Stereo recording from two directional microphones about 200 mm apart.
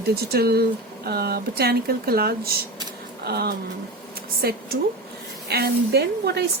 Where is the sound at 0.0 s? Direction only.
50° right (ahead or behind).